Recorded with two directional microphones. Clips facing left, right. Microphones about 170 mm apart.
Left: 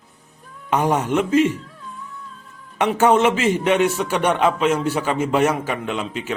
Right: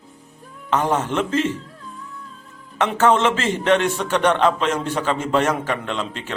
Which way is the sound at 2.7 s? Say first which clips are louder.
Left 1 dB; 10° left (ahead or behind).